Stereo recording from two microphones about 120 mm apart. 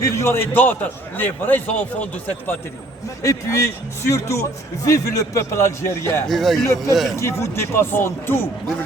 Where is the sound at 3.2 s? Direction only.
25° left (ahead or behind).